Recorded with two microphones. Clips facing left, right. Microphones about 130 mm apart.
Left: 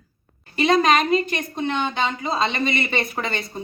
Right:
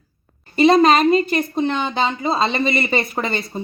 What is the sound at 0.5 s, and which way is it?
Speech, 35° right (ahead or behind).